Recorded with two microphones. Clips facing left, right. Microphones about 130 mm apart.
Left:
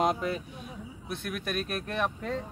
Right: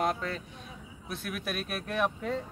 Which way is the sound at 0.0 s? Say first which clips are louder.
Left 3 dB; 15° left (ahead or behind).